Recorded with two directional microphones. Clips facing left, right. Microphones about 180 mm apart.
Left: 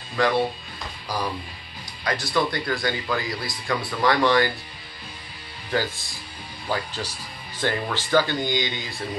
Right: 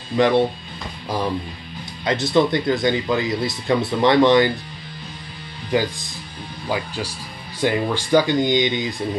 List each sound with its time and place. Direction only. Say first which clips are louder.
0.1 s speech: right 5 dB; 20° right (ahead or behind)
5.7 s speech: right 5 dB; 15° right (ahead or behind)